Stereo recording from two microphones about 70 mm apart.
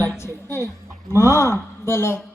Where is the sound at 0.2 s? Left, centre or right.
Left.